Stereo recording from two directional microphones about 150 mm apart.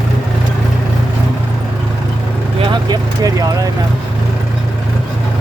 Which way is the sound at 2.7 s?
25° right (ahead or behind).